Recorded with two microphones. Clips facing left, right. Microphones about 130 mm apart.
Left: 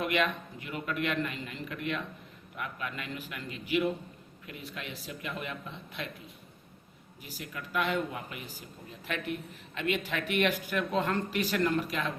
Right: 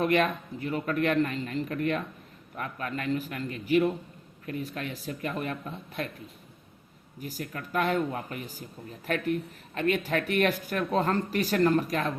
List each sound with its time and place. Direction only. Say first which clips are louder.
0.0 s speech: right 5 dB; 40° right (ahead or behind)
7.2 s speech: right 6 dB; 45° right (ahead or behind)